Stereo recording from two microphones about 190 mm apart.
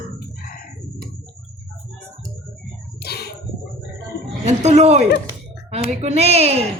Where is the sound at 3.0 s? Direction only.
55° left (ahead or behind).